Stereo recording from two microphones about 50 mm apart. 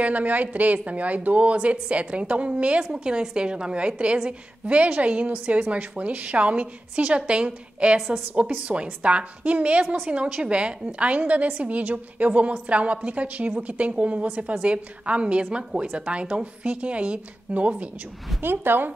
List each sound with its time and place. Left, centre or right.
0.0 s a woman's voice: right
18.4 s a woman's voice: right